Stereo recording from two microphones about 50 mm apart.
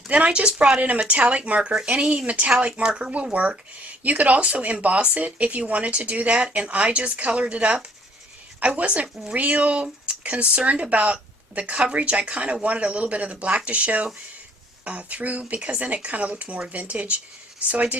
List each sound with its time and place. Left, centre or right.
0.1 s speech: right